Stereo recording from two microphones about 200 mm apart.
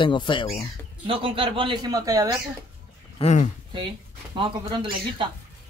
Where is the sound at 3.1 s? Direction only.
35° left (ahead or behind).